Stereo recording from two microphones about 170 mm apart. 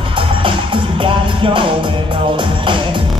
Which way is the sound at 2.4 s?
30° right (ahead or behind).